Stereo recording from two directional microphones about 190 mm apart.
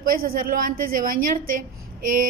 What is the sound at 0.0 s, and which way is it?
A woman's voice, 50° right (ahead or behind).